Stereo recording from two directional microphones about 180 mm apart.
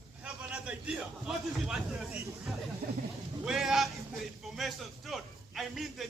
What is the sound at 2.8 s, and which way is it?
Speech, 50° right (ahead or behind).